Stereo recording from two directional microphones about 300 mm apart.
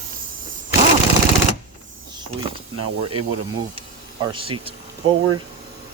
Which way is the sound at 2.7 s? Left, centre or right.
Right.